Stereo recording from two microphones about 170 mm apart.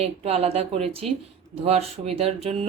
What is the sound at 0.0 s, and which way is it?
A woman's voice, 35° right (ahead or behind).